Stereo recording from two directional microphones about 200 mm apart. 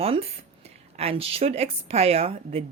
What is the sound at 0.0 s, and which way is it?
A woman's voice, 30° right (ahead or behind).